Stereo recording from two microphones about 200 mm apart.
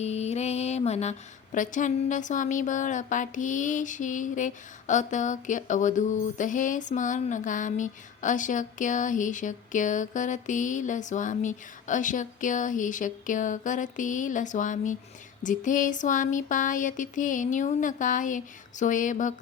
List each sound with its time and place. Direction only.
0.0 s mantra: 35° left (ahead or behind)
1.5 s speech: 40° left (ahead or behind)